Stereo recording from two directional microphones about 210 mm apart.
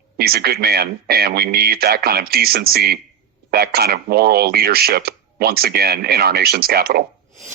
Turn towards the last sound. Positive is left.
turn(degrees=-45)  # may be behind; listen again after turning